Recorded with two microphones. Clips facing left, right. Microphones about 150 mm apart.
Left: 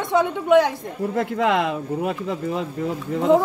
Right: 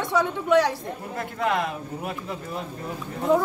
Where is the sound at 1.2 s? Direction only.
90° left.